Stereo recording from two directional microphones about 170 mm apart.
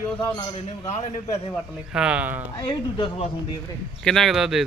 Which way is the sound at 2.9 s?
30° left (ahead or behind).